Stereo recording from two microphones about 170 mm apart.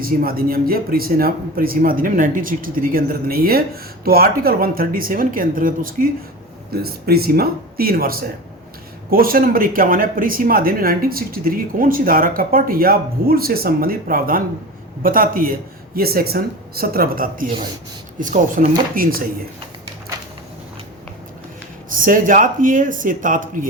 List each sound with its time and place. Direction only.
0.0 s speech: 60° right (ahead or behind)
21.8 s speech: 55° right (ahead or behind)